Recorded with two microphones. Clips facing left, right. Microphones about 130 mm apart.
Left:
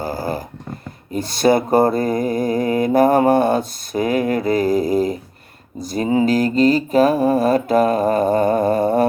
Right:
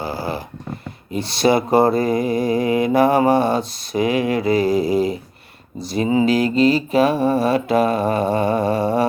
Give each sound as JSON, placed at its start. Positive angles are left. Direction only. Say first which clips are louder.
{"t": 0.0, "sound": "snoring", "louder": "left 2 dB", "side_deg": 45}
{"t": 1.1, "sound": "mantra", "louder": "left 1 dB", "side_deg": 50}